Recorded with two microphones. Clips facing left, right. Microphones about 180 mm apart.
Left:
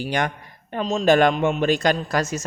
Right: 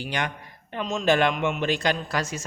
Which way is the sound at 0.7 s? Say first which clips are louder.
Left 5 dB; 35° left (ahead or behind).